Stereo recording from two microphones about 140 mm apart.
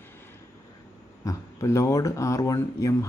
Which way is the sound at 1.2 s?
20° left (ahead or behind).